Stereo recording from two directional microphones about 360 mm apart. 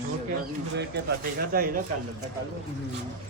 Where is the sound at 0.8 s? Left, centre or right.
Right.